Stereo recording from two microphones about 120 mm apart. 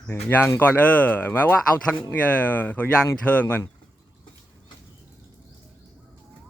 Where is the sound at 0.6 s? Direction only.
15° left (ahead or behind).